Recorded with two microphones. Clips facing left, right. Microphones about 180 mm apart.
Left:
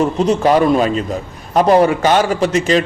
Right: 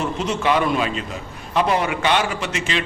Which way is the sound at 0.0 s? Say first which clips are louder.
Left 8 dB; 40° left (ahead or behind).